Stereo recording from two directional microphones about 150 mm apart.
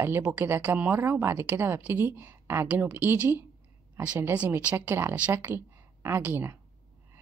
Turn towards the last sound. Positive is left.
turn(degrees=-15)  # may be behind; listen again after turning